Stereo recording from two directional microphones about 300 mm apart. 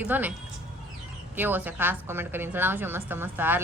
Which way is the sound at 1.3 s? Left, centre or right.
Centre.